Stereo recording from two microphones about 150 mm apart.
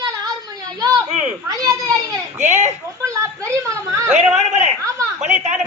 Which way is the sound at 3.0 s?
20° right (ahead or behind).